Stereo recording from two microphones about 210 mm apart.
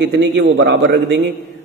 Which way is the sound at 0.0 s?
55° right (ahead or behind).